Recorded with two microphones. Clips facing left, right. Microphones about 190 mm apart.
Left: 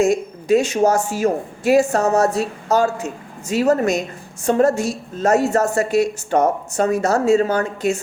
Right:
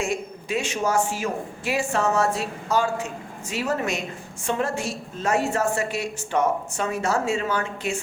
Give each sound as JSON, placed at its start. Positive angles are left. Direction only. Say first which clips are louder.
{"t": 0.0, "sound": "a woman's voice", "louder": "left 10 dB", "side_deg": 40}